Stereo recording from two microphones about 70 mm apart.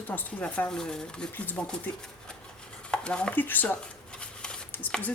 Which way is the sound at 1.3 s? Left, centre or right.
Left.